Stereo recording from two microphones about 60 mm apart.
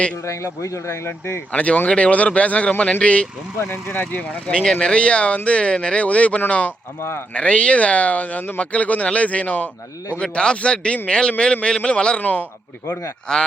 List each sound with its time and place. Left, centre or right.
0.3 s a man's voice: left
1.5 s speech: left
3.6 s speech: left
4.4 s a man's voice: centre
13.3 s a man's voice: centre